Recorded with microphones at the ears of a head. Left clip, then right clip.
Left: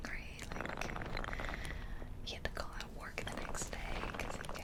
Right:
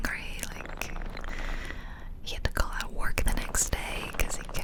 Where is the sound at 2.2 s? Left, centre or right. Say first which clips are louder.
Right 10 dB; right.